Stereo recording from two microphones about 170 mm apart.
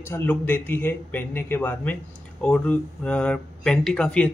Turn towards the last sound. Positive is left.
turn(degrees=5)  # may be behind; listen again after turning